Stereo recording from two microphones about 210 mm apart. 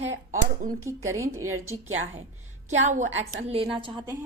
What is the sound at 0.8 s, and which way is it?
Speech, 15° right (ahead or behind).